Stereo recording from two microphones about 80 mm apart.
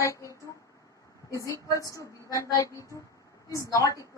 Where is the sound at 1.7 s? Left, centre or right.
Left.